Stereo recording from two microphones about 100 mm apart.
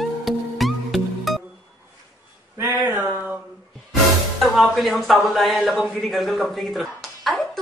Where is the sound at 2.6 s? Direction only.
20° right (ahead or behind).